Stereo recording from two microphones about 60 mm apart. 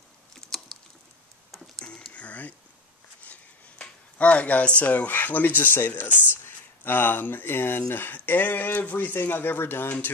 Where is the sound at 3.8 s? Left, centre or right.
Left.